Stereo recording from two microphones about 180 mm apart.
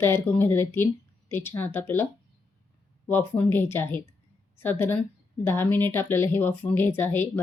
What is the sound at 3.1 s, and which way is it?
A woman's voice, 10° left (ahead or behind).